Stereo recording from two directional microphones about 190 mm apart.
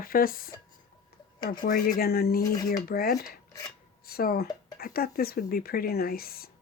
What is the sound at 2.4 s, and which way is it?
Speech, 20° left (ahead or behind).